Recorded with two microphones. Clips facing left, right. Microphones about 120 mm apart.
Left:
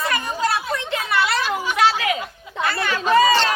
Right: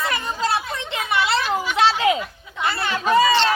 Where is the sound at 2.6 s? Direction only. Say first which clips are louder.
Even; 25° right (ahead or behind).